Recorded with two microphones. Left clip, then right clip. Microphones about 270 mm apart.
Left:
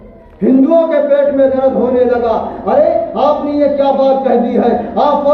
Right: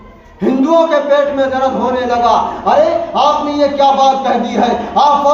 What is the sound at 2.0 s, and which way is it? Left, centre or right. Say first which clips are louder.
A man's voice: right 2 dB; centre.